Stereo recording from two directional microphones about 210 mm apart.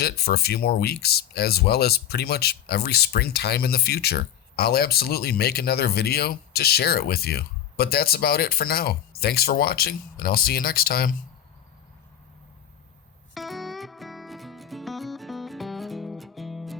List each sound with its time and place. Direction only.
0.0 s speech: 50° left (ahead or behind)
13.3 s music: centre (ahead or behind)